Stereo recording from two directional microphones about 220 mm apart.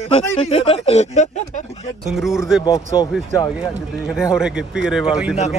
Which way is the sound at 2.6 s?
15° left (ahead or behind).